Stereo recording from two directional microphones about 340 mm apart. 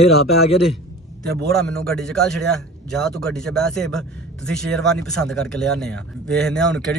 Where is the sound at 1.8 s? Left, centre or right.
Centre.